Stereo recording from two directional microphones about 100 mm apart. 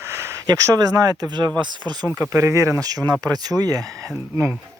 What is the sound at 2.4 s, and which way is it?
Speech, 30° right (ahead or behind).